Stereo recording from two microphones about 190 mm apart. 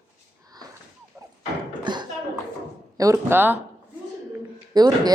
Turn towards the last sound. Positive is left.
turn(degrees=-20)  # may be behind; listen again after turning